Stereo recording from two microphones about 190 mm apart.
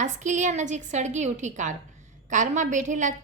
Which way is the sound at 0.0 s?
40° right (ahead or behind).